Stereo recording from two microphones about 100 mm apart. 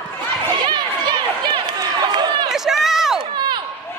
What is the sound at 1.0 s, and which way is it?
Run, 50° right (ahead or behind).